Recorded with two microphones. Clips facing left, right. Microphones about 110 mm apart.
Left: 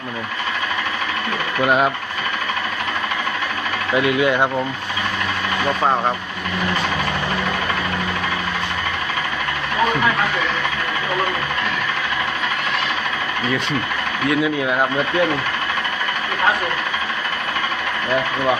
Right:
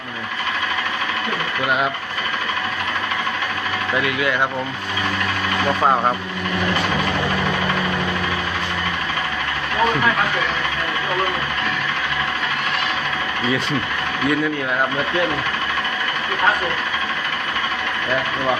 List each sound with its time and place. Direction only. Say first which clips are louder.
1.6 s speech: left 4 dB; 25° left (ahead or behind)
3.9 s speech: left 5 dB; 25° left (ahead or behind)
5.8 s speech: right 2 dB; 10° right (ahead or behind)
14.3 s speech: left 2 dB; 10° left (ahead or behind)